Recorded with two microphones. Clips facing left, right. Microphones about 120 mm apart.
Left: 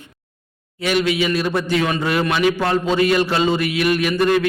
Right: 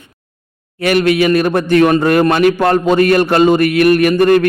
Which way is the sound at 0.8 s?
60° right (ahead or behind).